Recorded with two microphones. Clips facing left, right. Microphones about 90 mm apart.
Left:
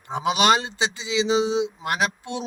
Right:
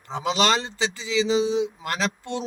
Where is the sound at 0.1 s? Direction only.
15° left (ahead or behind).